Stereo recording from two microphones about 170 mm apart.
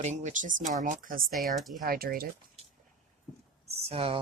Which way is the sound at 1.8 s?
60° right (ahead or behind).